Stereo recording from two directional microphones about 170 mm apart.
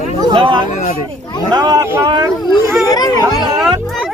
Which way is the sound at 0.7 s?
45° left (ahead or behind).